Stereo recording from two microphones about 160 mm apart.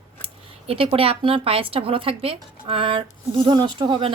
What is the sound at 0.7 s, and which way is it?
Speech, 35° right (ahead or behind).